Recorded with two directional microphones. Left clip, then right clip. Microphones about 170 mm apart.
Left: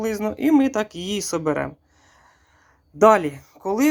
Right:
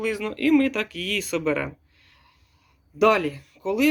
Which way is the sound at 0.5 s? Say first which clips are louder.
Left 3 dB; 40° left (ahead or behind).